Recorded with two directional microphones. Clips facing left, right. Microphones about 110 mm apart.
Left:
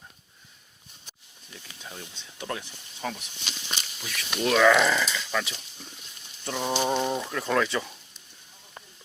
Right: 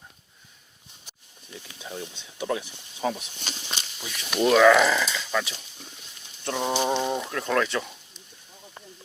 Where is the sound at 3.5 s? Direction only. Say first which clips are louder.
Right 2 dB; 40° right (ahead or behind).